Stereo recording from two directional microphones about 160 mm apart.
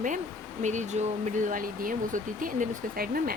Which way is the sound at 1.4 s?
60° right (ahead or behind).